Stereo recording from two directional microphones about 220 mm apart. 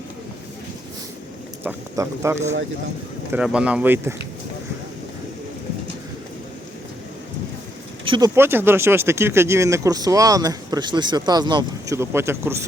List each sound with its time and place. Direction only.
1.6 s speech: 10° right (ahead or behind)
8.0 s speech: 20° right (ahead or behind)
8.4 s speech: 10° right (ahead or behind)